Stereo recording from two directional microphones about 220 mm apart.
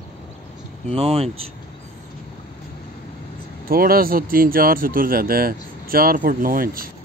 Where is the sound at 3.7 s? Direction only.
40° right (ahead or behind).